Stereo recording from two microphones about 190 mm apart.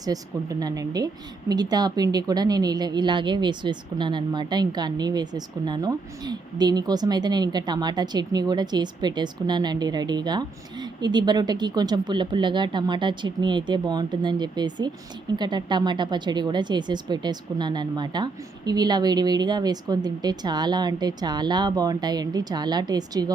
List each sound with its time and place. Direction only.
0.0 s a woman's voice: 20° right (ahead or behind)